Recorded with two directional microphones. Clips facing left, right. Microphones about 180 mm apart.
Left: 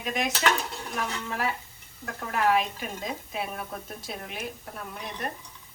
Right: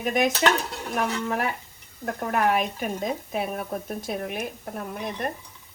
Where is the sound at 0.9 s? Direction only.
55° right (ahead or behind).